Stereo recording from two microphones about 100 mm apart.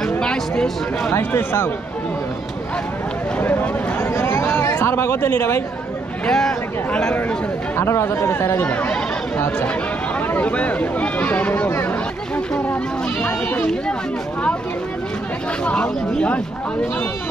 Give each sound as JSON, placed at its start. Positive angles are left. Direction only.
{"t": 0.2, "sound": "speech", "side_deg": 5}
{"t": 1.1, "sound": "speech", "side_deg": 25}
{"t": 3.3, "sound": "speech", "side_deg": 20}
{"t": 6.2, "sound": "speech", "side_deg": 5}
{"t": 7.2, "sound": "speech", "side_deg": 20}
{"t": 8.6, "sound": "speech", "side_deg": 15}
{"t": 15.6, "sound": "speech", "side_deg": 10}